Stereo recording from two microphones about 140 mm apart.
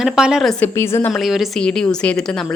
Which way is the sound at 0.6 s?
20° left (ahead or behind).